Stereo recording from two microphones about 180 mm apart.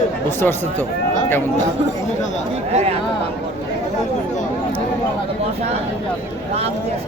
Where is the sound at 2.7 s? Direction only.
35° right (ahead or behind).